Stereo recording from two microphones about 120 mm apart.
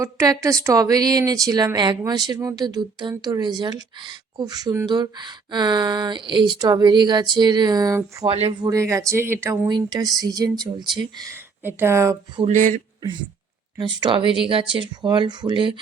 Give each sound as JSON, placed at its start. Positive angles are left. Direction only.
{"t": 0.0, "sound": "speech", "side_deg": -25}
{"t": 8.3, "sound": "speech", "side_deg": -55}
{"t": 8.6, "sound": "speech", "side_deg": -25}
{"t": 9.6, "sound": "speech", "side_deg": -35}
{"t": 11.6, "sound": "speech", "side_deg": -20}
{"t": 12.5, "sound": "speech", "side_deg": -90}
{"t": 13.0, "sound": "speech", "side_deg": -40}